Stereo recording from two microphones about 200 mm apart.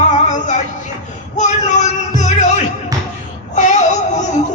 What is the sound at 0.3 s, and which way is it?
Music, 40° left (ahead or behind).